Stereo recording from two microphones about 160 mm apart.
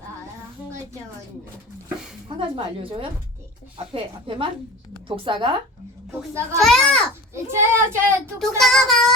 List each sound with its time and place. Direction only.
2.3 s speech: 30° right (ahead or behind)
3.9 s speech: 35° right (ahead or behind)
6.1 s speech: 15° right (ahead or behind)
6.6 s speech: 5° left (ahead or behind)
7.5 s speech: 15° right (ahead or behind)
8.4 s speech: centre (ahead or behind)